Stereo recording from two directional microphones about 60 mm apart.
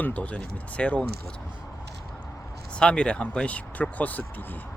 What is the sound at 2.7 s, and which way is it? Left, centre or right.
Speech, centre.